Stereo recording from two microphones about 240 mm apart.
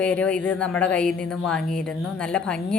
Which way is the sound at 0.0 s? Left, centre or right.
Centre.